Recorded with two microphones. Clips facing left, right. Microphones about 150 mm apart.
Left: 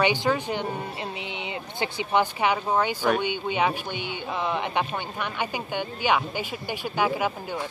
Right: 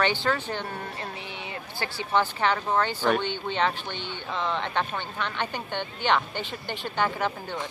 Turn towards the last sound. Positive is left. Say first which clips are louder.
# left 2 dB
turn(degrees=10)  # may be behind; listen again after turning